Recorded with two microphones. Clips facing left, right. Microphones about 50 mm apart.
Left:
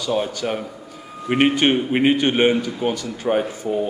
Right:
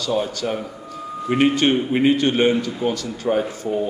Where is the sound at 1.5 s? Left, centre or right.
Centre.